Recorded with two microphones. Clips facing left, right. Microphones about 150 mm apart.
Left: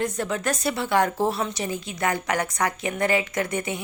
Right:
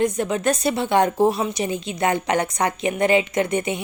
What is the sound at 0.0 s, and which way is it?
A woman's voice, 20° right (ahead or behind).